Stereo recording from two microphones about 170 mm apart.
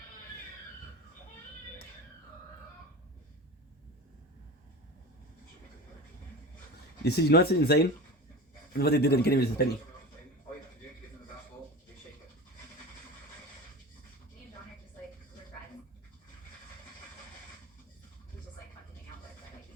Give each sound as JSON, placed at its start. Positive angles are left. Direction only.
{"t": 7.0, "sound": "speech", "side_deg": 70}